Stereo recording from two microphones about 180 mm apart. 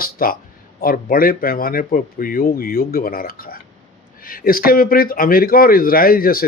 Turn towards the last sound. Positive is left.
turn(degrees=55)  # may be behind; listen again after turning